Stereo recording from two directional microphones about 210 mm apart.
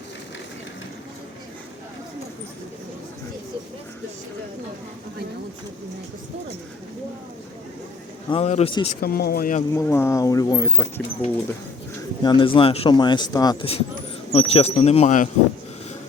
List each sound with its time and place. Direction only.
8.3 s speech: 30° left (ahead or behind)
9.0 s speech: 45° left (ahead or behind)
9.7 s speech: 10° left (ahead or behind)
12.2 s speech: 20° left (ahead or behind)